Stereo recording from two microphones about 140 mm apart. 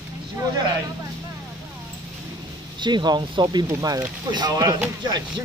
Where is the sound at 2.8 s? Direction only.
30° right (ahead or behind).